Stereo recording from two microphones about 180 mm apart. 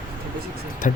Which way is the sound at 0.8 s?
45° left (ahead or behind).